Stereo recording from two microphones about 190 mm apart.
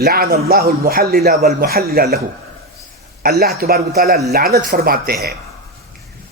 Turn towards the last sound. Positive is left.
turn(degrees=-55)  # may be behind; listen again after turning